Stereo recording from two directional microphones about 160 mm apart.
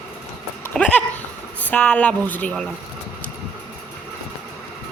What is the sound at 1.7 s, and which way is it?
Speech, 5° left (ahead or behind).